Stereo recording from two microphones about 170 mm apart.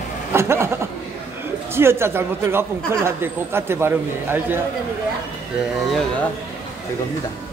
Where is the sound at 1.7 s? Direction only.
15° right (ahead or behind).